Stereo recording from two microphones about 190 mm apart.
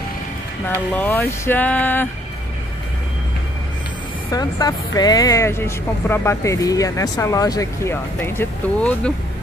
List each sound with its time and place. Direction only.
0.9 s speech: 10° left (ahead or behind)
4.3 s speech: 20° left (ahead or behind)